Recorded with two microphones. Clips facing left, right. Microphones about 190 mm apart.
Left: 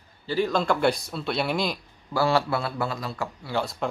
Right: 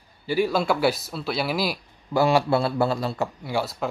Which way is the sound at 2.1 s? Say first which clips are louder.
Right 3 dB; 20° right (ahead or behind).